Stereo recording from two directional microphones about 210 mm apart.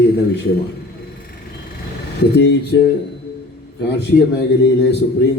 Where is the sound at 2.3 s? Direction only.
55° left (ahead or behind).